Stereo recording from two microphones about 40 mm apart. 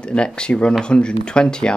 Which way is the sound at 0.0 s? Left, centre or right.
Left.